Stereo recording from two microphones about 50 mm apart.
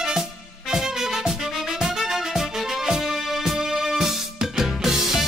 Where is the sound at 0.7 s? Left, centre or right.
Centre.